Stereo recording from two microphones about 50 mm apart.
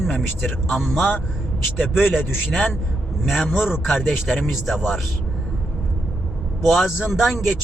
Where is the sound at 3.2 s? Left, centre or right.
Centre.